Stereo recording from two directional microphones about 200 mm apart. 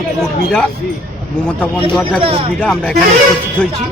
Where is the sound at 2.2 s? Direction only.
30° right (ahead or behind).